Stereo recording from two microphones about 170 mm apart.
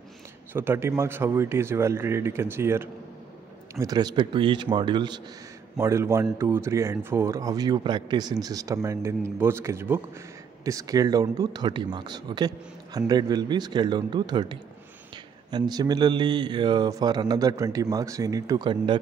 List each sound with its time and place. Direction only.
0.5 s a man's voice: 15° right (ahead or behind)
5.8 s a man's voice: 15° right (ahead or behind)